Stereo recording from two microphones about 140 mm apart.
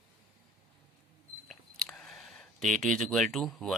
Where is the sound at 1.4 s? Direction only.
5° left (ahead or behind).